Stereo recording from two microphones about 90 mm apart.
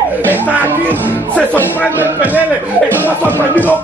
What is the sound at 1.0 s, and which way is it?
Speech, 20° left (ahead or behind).